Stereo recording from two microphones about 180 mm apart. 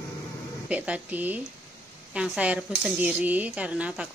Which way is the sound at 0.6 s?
5° right (ahead or behind).